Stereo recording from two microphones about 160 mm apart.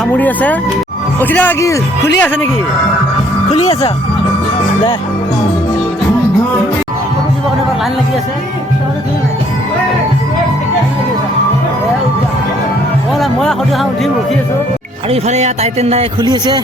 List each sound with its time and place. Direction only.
0.1 s speech: 10° left (ahead or behind)
13.1 s music: centre (ahead or behind)
15.1 s speech: 45° right (ahead or behind)
16.2 s a man's voice: 25° right (ahead or behind)